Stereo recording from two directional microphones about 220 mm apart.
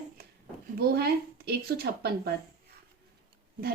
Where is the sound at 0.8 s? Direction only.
45° right (ahead or behind).